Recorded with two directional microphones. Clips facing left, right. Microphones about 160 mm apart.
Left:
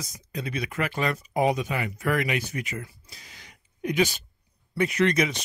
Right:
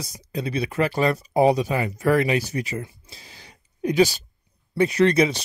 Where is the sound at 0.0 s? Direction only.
30° right (ahead or behind).